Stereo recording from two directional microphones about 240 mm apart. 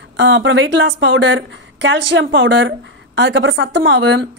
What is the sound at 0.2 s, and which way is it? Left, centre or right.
A woman's voice, right.